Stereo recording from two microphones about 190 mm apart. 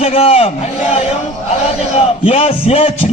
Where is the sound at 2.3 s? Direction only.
30° left (ahead or behind).